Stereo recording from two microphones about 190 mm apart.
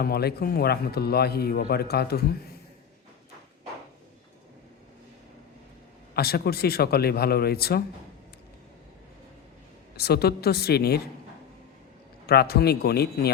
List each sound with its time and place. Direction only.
0.0 s a man's voice: 55° left (ahead or behind)
6.1 s a man's voice: 55° left (ahead or behind)
10.0 s a man's voice: 55° left (ahead or behind)
12.2 s a man's voice: 55° left (ahead or behind)